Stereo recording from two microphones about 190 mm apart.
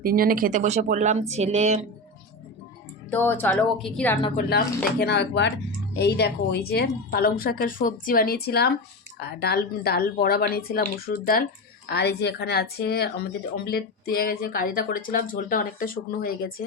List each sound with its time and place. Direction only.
0.0 s speech: 50° right (ahead or behind)
3.1 s a woman's voice: 10° left (ahead or behind)
4.4 s a woman's voice: 55° left (ahead or behind)